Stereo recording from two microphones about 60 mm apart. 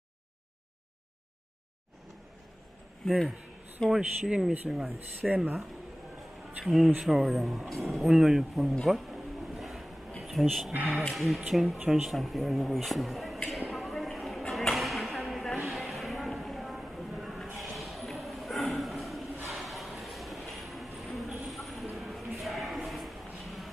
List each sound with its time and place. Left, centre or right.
3.1 s speech: centre
5.3 s speech: right
6.6 s speech: centre
8.8 s a sound: centre
11.1 s speech: centre
13.5 s a sound: centre